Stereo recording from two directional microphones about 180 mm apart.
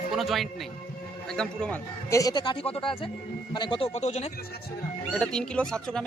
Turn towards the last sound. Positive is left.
turn(degrees=5)  # may be behind; listen again after turning